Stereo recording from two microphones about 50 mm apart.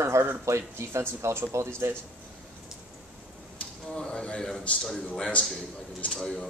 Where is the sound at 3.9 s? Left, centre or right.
Centre.